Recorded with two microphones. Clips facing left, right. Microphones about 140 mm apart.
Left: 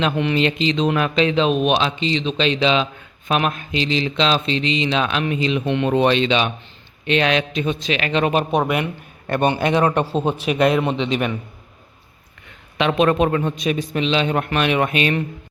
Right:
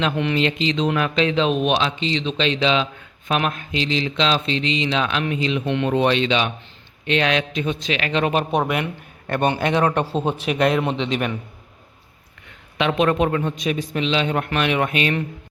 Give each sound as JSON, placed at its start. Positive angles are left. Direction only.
{"t": 0.2, "sound": "a man's voice", "side_deg": 10}
{"t": 8.3, "sound": "a man's voice", "side_deg": 10}
{"t": 12.7, "sound": "a man's voice", "side_deg": 30}